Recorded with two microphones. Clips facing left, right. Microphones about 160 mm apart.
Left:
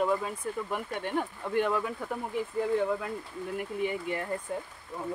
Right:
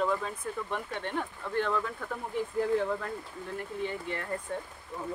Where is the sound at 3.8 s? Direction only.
10° left (ahead or behind).